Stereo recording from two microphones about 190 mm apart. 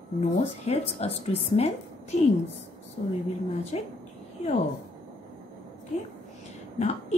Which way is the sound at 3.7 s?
35° left (ahead or behind).